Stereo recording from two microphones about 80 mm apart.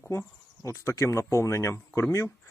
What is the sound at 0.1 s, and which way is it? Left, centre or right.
Speech, left.